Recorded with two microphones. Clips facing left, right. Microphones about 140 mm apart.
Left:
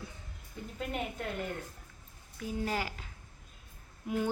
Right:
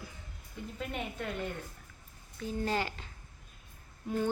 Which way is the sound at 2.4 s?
10° left (ahead or behind).